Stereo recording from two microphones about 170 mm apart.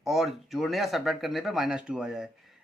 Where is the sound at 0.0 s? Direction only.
Centre (ahead or behind).